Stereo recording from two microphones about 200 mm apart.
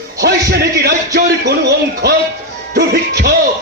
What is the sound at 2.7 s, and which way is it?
Music, 55° right (ahead or behind).